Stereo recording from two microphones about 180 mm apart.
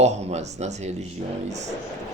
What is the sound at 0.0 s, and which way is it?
Speech, 35° right (ahead or behind).